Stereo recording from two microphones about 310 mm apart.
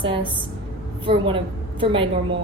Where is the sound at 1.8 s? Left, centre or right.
Centre.